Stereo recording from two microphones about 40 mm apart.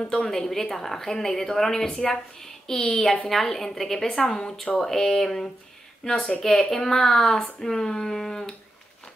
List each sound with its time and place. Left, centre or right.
0.3 s a woman's voice: centre